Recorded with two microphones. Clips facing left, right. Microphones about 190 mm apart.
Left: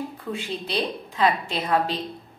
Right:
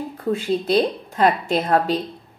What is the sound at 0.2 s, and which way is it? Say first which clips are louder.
A woman's voice: right 9 dB; 40° right (ahead or behind).